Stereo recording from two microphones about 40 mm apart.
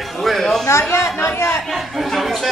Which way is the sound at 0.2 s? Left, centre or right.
Centre.